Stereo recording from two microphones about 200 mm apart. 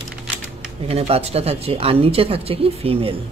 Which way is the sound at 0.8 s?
30° right (ahead or behind).